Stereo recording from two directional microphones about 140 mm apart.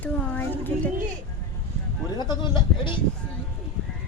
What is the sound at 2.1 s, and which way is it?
Speech, 35° left (ahead or behind).